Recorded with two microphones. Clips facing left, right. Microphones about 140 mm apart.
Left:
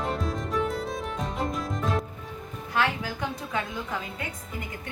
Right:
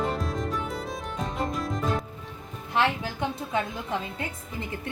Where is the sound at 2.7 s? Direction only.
25° right (ahead or behind).